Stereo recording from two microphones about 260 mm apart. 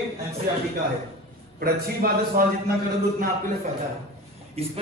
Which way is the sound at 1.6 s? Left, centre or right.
Right.